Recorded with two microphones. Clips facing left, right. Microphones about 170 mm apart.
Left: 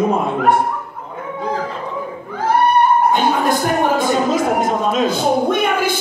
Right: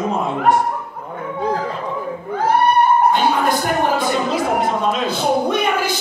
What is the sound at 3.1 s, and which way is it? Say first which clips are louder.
Speech: left 1 dB; 45° left (ahead or behind).